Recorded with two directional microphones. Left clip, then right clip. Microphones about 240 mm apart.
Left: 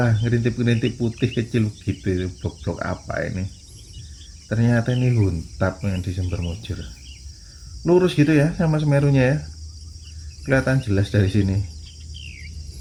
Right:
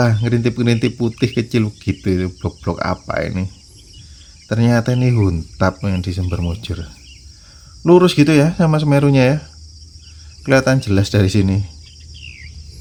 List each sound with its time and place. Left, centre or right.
0.0 s speech: right
7.9 s speech: right
10.4 s speech: right